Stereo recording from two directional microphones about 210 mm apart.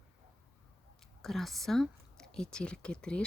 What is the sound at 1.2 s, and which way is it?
A woman's voice, centre (ahead or behind).